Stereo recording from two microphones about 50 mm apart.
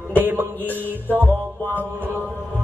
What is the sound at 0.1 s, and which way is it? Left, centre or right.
Music, right.